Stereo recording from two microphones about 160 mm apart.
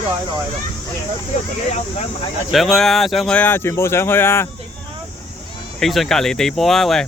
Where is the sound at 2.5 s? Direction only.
Centre (ahead or behind).